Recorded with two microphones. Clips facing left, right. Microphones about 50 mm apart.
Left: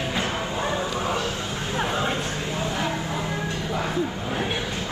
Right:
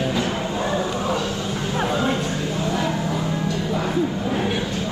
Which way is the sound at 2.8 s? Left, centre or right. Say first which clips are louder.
Right 3 dB; left.